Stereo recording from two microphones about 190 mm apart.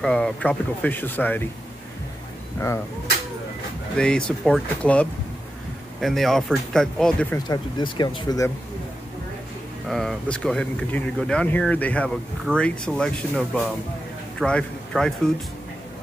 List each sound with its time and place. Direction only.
0.0 s speech: 5° left (ahead or behind)
3.9 s speech: 5° left (ahead or behind)
7.3 s speech: 20° left (ahead or behind)
9.8 s a man's voice: centre (ahead or behind)